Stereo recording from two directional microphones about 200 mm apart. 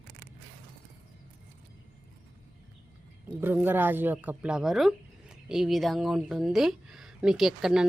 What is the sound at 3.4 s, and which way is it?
Speech, 10° right (ahead or behind).